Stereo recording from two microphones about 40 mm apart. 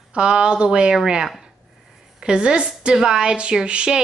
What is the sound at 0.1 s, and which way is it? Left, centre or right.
A woman's voice, right.